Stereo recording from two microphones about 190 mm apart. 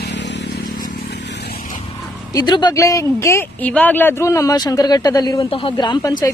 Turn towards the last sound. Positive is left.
turn(degrees=20)  # may be behind; listen again after turning